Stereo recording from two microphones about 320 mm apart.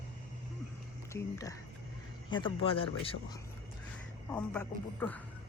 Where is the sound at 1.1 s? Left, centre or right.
Centre.